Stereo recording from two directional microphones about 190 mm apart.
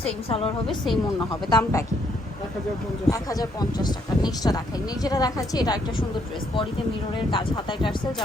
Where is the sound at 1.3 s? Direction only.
20° left (ahead or behind).